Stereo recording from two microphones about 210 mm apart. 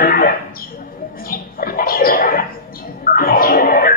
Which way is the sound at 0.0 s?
45° left (ahead or behind).